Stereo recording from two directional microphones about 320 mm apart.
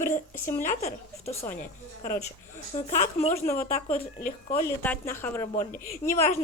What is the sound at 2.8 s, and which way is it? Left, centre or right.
Speech, left.